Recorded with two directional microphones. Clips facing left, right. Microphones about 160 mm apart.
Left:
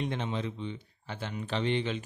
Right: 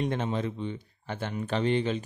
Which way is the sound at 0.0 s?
45° right (ahead or behind).